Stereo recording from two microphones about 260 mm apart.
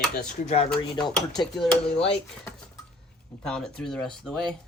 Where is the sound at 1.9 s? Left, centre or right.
Left.